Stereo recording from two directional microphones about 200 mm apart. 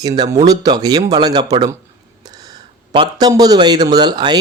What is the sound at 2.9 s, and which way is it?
Speech, 20° right (ahead or behind).